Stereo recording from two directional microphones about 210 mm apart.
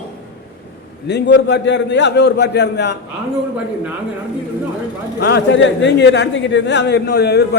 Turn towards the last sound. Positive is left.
turn(degrees=50)  # may be behind; listen again after turning